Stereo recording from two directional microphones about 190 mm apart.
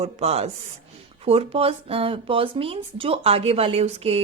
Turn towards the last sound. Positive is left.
turn(degrees=-30)  # may be behind; listen again after turning